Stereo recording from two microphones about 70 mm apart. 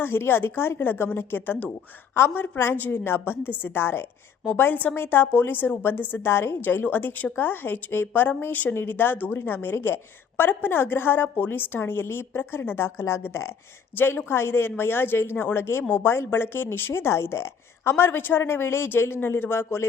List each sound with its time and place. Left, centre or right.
0.0 s a woman's voice: left
2.1 s a woman's voice: left